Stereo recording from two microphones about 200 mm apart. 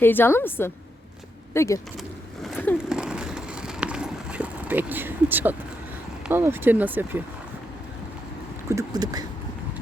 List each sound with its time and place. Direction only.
0.0 s a woman's voice: 10° left (ahead or behind)
2.0 s a sound: centre (ahead or behind)
6.2 s speech: 10° right (ahead or behind)
8.7 s speech: 20° right (ahead or behind)